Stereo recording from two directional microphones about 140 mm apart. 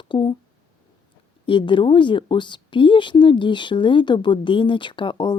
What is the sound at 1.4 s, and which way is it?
A woman's voice, 35° left (ahead or behind).